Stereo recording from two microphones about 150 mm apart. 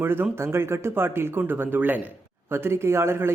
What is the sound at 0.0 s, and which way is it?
A man's voice, 15° right (ahead or behind).